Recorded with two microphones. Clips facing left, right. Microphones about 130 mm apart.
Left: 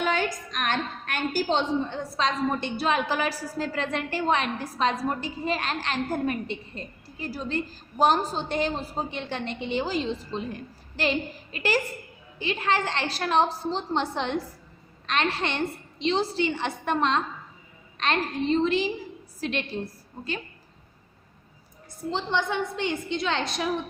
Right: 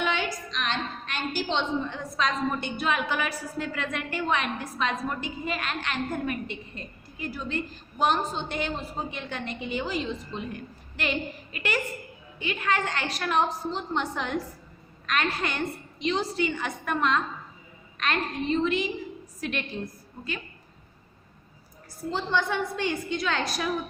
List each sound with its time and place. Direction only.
0.0 s a woman's voice: 45° left (ahead or behind)
22.1 s a woman's voice: 20° left (ahead or behind)